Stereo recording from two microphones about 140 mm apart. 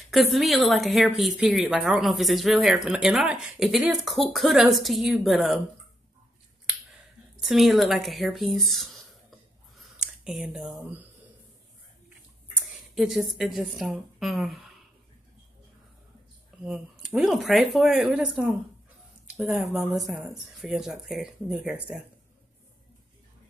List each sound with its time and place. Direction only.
0.1 s a woman's voice: centre (ahead or behind)
7.4 s a woman's voice: centre (ahead or behind)
9.8 s a sound: centre (ahead or behind)
10.7 s speech: 15° right (ahead or behind)
12.9 s a woman's voice: centre (ahead or behind)
16.6 s a woman's voice: 5° right (ahead or behind)